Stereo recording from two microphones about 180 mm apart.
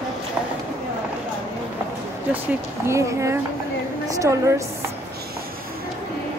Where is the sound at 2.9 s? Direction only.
15° right (ahead or behind).